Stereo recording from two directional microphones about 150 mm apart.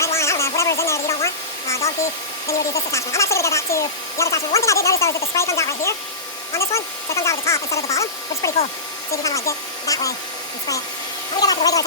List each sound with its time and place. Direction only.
0.0 s hair dryer: 20° left (ahead or behind)
2.7 s speech: 20° left (ahead or behind)
11.3 s speech: 25° left (ahead or behind)